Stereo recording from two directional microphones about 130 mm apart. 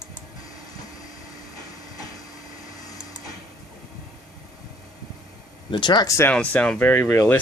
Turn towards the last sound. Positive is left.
turn(degrees=15)  # may be behind; listen again after turning